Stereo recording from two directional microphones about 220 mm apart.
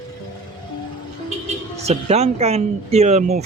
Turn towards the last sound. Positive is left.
turn(degrees=-30)  # may be behind; listen again after turning